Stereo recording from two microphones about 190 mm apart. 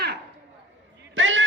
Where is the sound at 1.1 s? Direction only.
85° right.